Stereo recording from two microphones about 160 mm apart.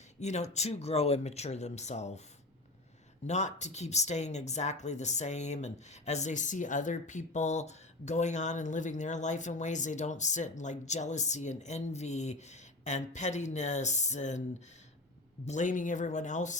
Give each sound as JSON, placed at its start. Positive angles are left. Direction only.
{"t": 0.2, "sound": "speech", "side_deg": 45}
{"t": 3.2, "sound": "speech", "side_deg": 45}
{"t": 15.4, "sound": "speech", "side_deg": 50}